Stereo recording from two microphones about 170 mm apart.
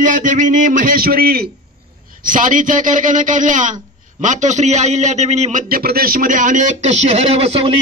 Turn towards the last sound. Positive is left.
turn(degrees=-35)  # may be behind; listen again after turning